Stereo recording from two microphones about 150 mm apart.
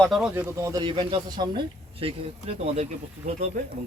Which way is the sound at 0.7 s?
30° right (ahead or behind).